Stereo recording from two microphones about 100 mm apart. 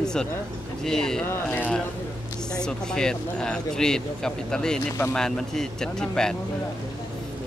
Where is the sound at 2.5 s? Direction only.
5° left (ahead or behind).